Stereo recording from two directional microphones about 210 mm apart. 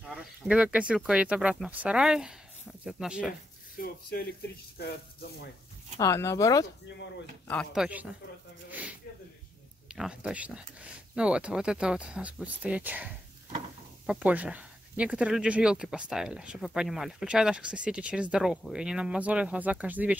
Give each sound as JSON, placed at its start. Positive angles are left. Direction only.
{"t": 0.0, "sound": "speech", "side_deg": -5}
{"t": 3.7, "sound": "speech", "side_deg": 45}
{"t": 5.9, "sound": "speech", "side_deg": 15}
{"t": 7.4, "sound": "speech", "side_deg": 0}
{"t": 9.9, "sound": "speech", "side_deg": -5}